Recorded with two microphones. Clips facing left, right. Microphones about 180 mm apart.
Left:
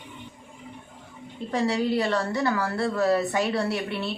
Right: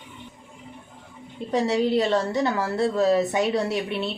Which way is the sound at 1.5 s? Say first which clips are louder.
Right 3 dB; 20° right (ahead or behind).